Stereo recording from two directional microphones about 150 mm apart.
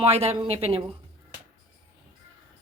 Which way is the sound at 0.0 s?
40° right (ahead or behind).